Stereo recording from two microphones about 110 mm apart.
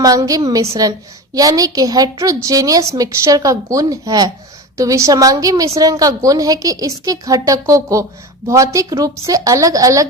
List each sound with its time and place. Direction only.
0.0 s a woman's voice: 35° right (ahead or behind)